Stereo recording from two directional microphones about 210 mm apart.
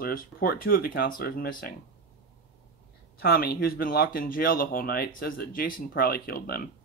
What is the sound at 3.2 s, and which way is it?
Speech, 45° left (ahead or behind).